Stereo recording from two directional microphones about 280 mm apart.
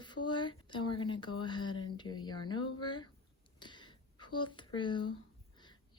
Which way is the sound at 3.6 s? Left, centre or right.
Centre.